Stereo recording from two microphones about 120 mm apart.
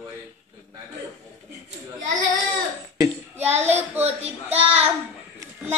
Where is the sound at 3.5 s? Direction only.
65° right (ahead or behind).